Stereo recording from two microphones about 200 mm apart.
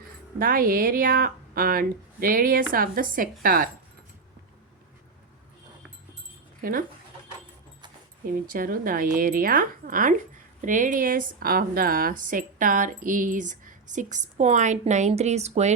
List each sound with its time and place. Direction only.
0.3 s speech: 45° right (ahead or behind)
6.6 s speech: 45° right (ahead or behind)
8.3 s a woman's voice: 45° right (ahead or behind)